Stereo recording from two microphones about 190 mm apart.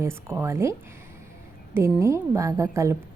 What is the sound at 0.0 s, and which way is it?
A woman's voice, 15° right (ahead or behind).